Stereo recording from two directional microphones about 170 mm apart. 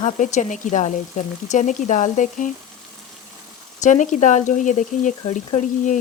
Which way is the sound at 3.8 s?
45° left (ahead or behind).